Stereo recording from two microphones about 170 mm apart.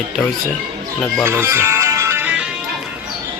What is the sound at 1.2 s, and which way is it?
Music, 15° right (ahead or behind).